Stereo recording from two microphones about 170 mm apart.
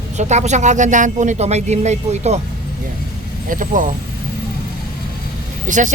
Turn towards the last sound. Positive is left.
turn(degrees=-50)  # may be behind; listen again after turning